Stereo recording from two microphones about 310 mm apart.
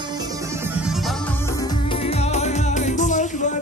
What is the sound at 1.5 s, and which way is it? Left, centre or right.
Music, centre.